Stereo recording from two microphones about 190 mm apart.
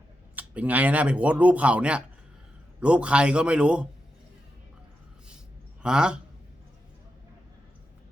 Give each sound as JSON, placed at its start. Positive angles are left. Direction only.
{"t": 0.3, "sound": "speech", "side_deg": -10}
{"t": 5.8, "sound": "speech", "side_deg": -5}